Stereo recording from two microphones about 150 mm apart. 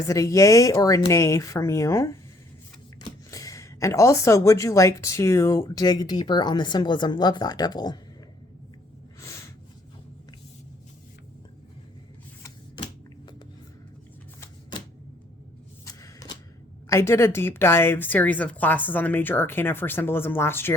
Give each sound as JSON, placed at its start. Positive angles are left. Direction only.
{"t": 0.1, "sound": "speech", "side_deg": 20}
{"t": 9.2, "sound": "a sound", "side_deg": 20}
{"t": 12.4, "sound": "typewriter", "side_deg": 30}
{"t": 15.9, "sound": "shuffling cards", "side_deg": 20}
{"t": 16.9, "sound": "a woman's voice", "side_deg": 20}